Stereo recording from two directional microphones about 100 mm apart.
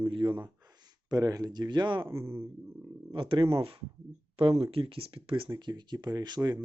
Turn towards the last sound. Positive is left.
turn(degrees=-45)  # may be behind; listen again after turning